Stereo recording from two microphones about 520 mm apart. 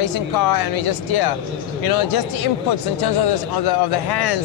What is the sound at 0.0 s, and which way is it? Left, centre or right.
Speech, left.